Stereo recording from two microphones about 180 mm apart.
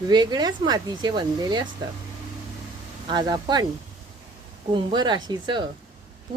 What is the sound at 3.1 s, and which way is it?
Speech, 25° right (ahead or behind).